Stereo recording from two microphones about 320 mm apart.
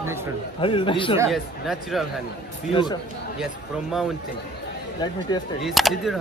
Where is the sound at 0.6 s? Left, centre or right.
Centre.